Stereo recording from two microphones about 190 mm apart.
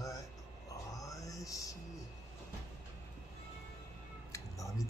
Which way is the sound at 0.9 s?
15° left (ahead or behind).